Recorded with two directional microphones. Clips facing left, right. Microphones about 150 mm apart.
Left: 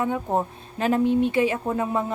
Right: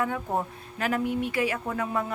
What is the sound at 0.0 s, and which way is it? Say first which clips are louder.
Speech: left 4 dB; 25° left (ahead or behind).